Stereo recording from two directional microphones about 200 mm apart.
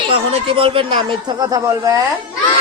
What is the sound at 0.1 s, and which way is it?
A man's voice, 30° right (ahead or behind).